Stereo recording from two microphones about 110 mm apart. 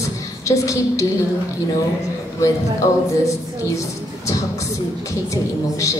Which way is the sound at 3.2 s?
30° left (ahead or behind).